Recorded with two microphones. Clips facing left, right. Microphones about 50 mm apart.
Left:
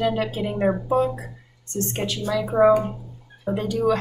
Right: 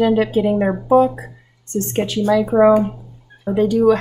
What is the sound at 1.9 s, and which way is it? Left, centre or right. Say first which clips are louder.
Speech: right 10 dB; right.